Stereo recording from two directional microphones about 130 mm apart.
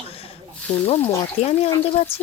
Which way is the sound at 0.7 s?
60° left (ahead or behind).